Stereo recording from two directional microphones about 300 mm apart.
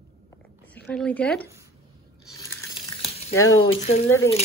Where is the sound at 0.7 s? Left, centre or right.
Centre.